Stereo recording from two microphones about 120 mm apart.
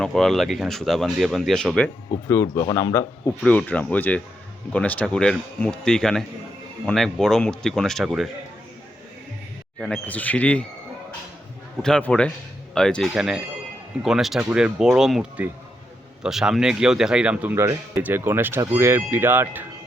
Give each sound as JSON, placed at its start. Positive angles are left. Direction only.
{"t": 0.0, "sound": "speech", "side_deg": 5}
{"t": 2.2, "sound": "speech", "side_deg": 25}
{"t": 3.4, "sound": "speech", "side_deg": 10}
{"t": 9.8, "sound": "speech", "side_deg": 10}
{"t": 11.8, "sound": "speech", "side_deg": 5}